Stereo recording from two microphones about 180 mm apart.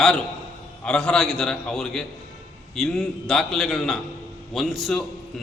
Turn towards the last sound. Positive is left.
turn(degrees=0)  # may be behind; listen again after turning